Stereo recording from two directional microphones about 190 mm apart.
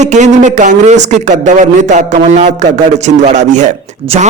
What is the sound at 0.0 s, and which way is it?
Speech, 40° right (ahead or behind).